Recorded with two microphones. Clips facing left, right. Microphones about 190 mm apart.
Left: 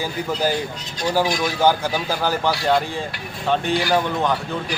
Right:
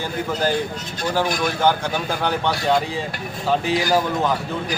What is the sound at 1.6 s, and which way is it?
Speech, 5° left (ahead or behind).